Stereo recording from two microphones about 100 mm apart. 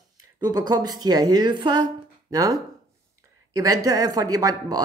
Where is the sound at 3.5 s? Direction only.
35° right (ahead or behind).